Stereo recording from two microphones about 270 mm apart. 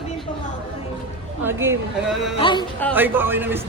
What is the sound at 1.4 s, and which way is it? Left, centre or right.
Speech, centre.